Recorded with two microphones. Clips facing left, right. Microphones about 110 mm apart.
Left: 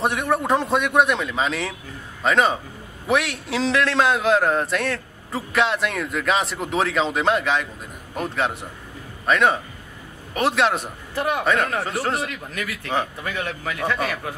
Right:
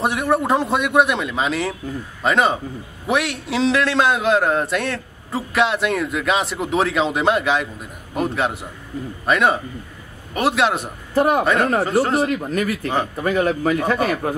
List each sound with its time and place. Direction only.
0.0 s a man's voice: centre (ahead or behind)
11.1 s a man's voice: 40° right (ahead or behind)
11.4 s a man's voice: centre (ahead or behind)
12.2 s a man's voice: 35° right (ahead or behind)